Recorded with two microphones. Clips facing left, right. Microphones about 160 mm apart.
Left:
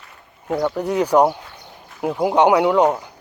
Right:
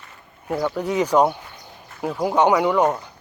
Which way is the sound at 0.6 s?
5° left (ahead or behind).